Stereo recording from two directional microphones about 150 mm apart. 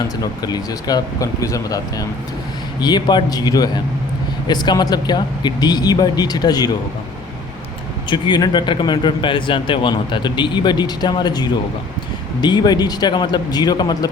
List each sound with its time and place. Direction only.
0.2 s speech: 25° left (ahead or behind)
8.1 s speech: 30° left (ahead or behind)